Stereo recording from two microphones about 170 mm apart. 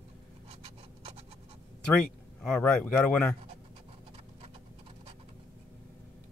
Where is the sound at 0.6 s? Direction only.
35° right (ahead or behind).